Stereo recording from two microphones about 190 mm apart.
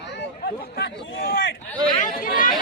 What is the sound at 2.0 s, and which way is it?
Chatter, 45° left (ahead or behind).